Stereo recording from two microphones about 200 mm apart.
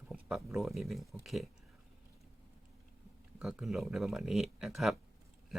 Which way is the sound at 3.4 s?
5° right (ahead or behind).